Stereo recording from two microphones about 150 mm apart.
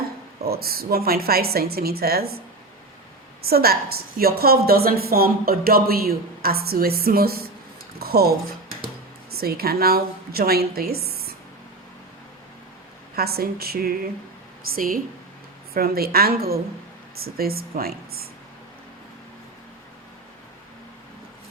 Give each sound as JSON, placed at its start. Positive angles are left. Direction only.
{"t": 0.4, "sound": "a woman's voice", "side_deg": -90}
{"t": 3.4, "sound": "a woman's voice", "side_deg": -90}
{"t": 7.9, "sound": "a sound", "side_deg": -90}
{"t": 9.3, "sound": "a woman's voice", "side_deg": -90}
{"t": 13.1, "sound": "a woman's voice", "side_deg": -90}
{"t": 14.8, "sound": "a woman's voice", "side_deg": -70}
{"t": 15.7, "sound": "a woman's voice", "side_deg": -90}